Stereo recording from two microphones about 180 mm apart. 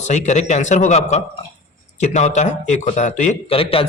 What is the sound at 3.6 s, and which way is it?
Speech, 30° left (ahead or behind).